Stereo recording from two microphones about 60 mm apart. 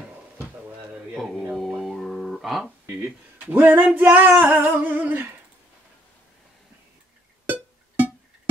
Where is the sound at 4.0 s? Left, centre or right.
Right.